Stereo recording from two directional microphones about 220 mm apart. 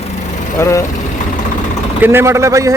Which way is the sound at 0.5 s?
15° left (ahead or behind).